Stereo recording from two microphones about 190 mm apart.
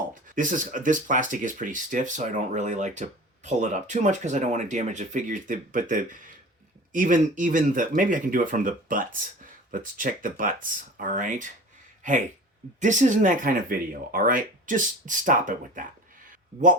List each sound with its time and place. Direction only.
0.1 s speech: 45° right (ahead or behind)
12.8 s speech: 40° right (ahead or behind)